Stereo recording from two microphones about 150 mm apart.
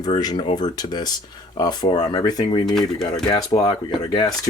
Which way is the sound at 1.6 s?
25° left (ahead or behind).